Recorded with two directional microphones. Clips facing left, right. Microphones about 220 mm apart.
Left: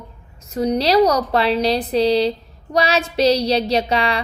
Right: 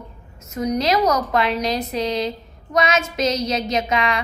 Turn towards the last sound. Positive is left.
turn(degrees=30)  # may be behind; listen again after turning